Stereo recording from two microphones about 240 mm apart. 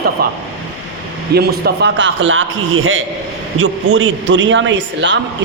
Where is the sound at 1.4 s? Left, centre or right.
Right.